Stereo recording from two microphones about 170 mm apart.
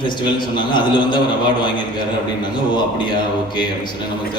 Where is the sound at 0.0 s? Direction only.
25° left (ahead or behind).